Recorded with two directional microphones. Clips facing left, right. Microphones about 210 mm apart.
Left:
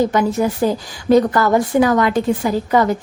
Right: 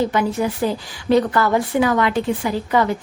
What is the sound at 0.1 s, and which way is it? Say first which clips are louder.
A woman's voice: left 3 dB; 45° left (ahead or behind).